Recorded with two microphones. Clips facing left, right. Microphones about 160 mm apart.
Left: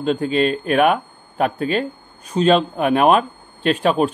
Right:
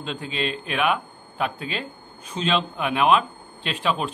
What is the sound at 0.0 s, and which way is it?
A man's voice, 50° left (ahead or behind).